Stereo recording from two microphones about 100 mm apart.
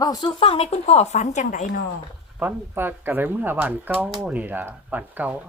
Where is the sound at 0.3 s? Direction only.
65° left (ahead or behind); by 1.0 s 90° left.